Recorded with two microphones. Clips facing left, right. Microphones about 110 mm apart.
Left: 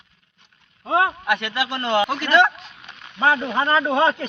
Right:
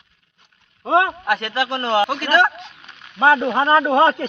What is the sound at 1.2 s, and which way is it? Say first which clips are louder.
Speech: right 2 dB; 35° right (ahead or behind).